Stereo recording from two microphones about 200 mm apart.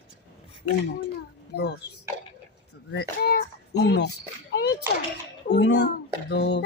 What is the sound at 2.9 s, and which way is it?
Speech, 50° left (ahead or behind).